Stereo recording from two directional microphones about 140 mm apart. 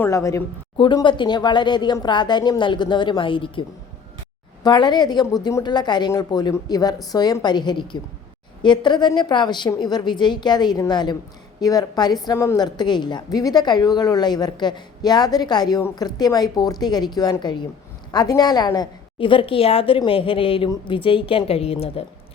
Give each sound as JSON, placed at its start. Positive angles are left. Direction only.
{"t": 0.0, "sound": "a woman's voice", "side_deg": 20}
{"t": 0.8, "sound": "a woman's voice", "side_deg": 35}